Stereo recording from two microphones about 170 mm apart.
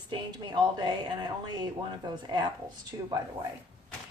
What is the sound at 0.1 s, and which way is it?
A woman's voice, 25° right (ahead or behind).